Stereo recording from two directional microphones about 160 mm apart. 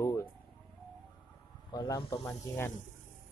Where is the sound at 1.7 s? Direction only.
25° left (ahead or behind).